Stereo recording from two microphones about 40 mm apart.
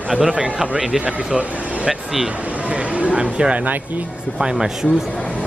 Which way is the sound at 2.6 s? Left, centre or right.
Right.